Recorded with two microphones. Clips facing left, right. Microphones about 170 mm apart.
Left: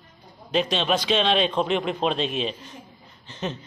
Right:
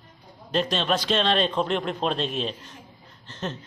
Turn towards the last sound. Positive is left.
turn(degrees=5)  # may be behind; listen again after turning